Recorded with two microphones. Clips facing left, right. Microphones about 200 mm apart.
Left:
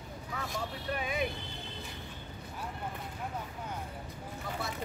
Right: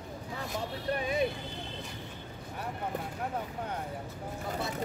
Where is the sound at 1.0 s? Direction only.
35° right (ahead or behind).